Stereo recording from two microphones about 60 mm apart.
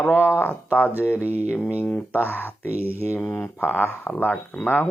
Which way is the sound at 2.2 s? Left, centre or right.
Left.